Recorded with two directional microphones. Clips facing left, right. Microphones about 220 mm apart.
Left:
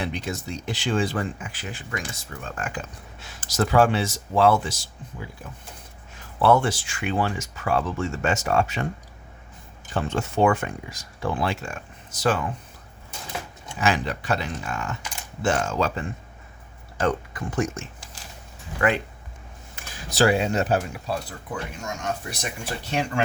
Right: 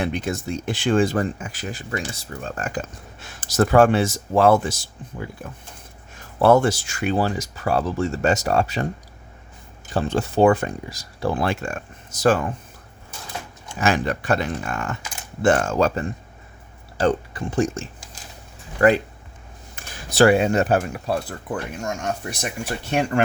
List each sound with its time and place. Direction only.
0.0 s speech: 50° right (ahead or behind)
6.1 s speech: 45° right (ahead or behind)
9.9 s speech: 35° right (ahead or behind)
13.7 s speech: 45° right (ahead or behind)
17.0 s speech: 30° right (ahead or behind)
20.1 s speech: 55° right (ahead or behind)